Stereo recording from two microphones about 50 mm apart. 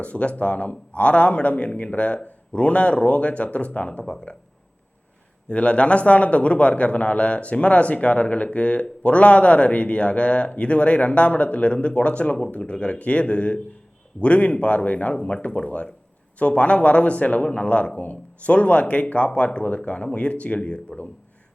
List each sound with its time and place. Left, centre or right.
0.0 s a man's voice: left
5.5 s a man's voice: left